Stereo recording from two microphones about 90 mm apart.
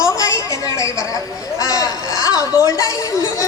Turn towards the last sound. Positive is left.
turn(degrees=40)  # may be behind; listen again after turning